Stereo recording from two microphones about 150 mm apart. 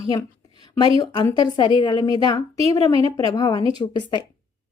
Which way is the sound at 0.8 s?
25° left (ahead or behind).